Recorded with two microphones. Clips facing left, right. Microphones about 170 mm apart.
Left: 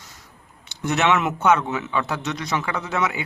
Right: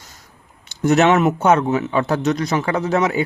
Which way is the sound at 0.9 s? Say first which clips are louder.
Right 7 dB; 45° right (ahead or behind).